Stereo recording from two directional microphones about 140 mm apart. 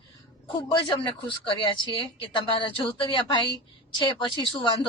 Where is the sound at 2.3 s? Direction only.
40° left (ahead or behind).